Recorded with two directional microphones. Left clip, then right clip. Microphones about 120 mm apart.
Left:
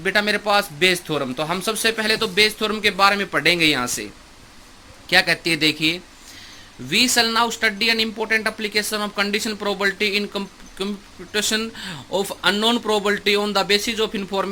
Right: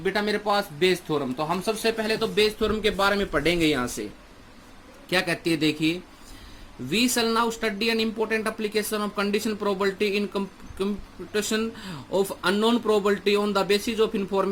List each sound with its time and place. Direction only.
0.0 s a man's voice: 25° left (ahead or behind)
5.0 s speech: 5° left (ahead or behind)